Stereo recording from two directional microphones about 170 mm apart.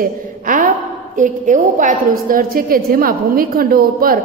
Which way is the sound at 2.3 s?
60° right (ahead or behind).